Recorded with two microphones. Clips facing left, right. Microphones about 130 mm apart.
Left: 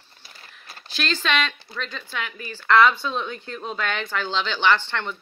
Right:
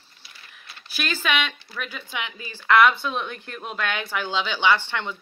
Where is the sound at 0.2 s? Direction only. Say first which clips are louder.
Left 2 dB; 45° left (ahead or behind).